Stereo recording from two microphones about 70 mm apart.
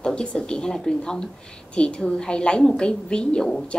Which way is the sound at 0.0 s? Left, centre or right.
Centre.